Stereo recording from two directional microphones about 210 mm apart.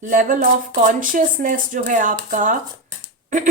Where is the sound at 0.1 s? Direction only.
40° right (ahead or behind).